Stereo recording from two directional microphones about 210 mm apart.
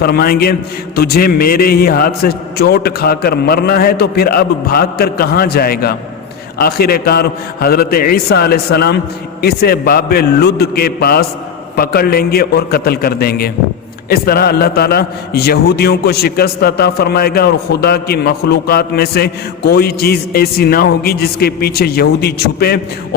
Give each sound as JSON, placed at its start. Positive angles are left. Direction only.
{"t": 0.0, "sound": "a man's voice", "side_deg": 45}